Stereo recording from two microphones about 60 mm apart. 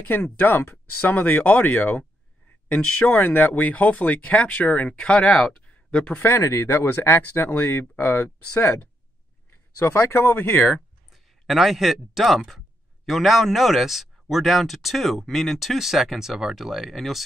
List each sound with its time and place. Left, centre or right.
0.0 s speech: left
3.1 s speech: left; by 5.3 s centre
5.7 s a sound: left
6.1 s speech: left
9.5 s speech: left
11.1 s speech: centre